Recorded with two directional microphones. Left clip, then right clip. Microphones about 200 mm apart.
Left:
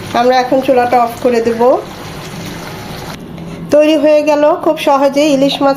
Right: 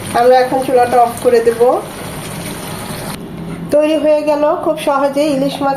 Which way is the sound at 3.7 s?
35° left (ahead or behind).